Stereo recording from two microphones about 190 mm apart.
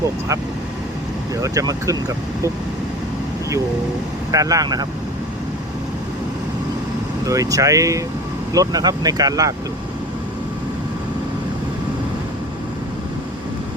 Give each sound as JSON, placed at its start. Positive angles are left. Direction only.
{"t": 1.4, "sound": "speech", "side_deg": -15}
{"t": 4.3, "sound": "speech", "side_deg": -20}
{"t": 7.3, "sound": "speech", "side_deg": -20}